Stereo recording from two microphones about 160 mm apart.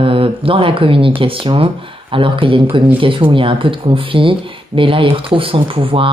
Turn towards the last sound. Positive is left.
turn(degrees=-35)  # may be behind; listen again after turning